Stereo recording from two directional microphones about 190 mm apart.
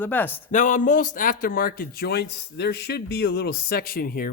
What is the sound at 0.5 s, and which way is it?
A man's voice, 40° left (ahead or behind).